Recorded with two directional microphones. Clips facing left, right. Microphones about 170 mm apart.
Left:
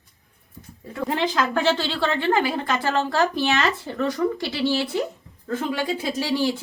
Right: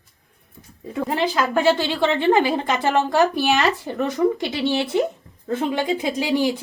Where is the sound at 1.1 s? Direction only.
5° right (ahead or behind).